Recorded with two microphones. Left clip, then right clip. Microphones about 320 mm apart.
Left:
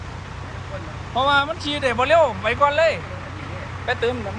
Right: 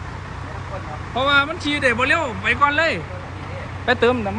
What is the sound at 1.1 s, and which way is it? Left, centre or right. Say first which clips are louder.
Speech: right 1 dB; centre.